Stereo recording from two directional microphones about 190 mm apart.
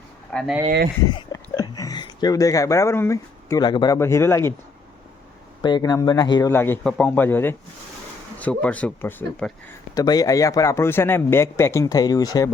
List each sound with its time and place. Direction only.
0.3 s speech: centre (ahead or behind)
1.0 s speech: 20° left (ahead or behind)
5.6 s a man's voice: 20° left (ahead or behind)